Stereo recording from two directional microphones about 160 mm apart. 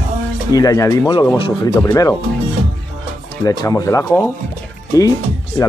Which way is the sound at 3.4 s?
20° left (ahead or behind).